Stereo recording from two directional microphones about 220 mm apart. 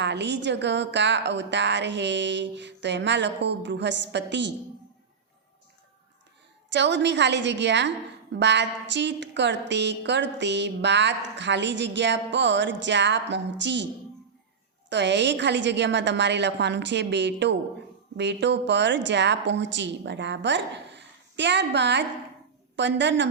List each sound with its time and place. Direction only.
0.0 s a woman's voice: 50° right (ahead or behind)
6.7 s a woman's voice: 55° right (ahead or behind)
14.8 s a woman's voice: 50° right (ahead or behind)